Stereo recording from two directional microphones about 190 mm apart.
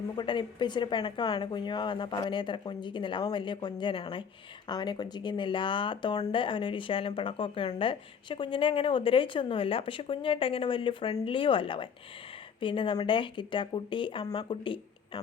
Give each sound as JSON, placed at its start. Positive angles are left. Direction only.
{"t": 0.2, "sound": "speech", "side_deg": 25}